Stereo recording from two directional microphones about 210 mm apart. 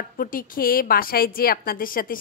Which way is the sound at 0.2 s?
40° left (ahead or behind).